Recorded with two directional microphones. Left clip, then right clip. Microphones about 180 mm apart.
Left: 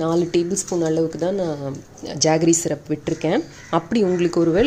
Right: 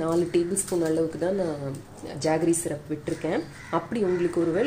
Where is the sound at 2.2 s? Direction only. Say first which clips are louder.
Left 7 dB; 50° left (ahead or behind).